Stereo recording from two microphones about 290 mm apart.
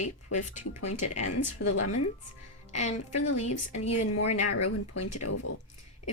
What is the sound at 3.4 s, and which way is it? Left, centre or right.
Speech, left.